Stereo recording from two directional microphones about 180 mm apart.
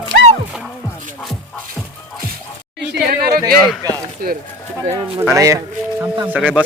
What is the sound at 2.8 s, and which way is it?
Speech, 55° right (ahead or behind).